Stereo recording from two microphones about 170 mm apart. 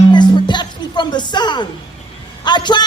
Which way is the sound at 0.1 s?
25° left (ahead or behind).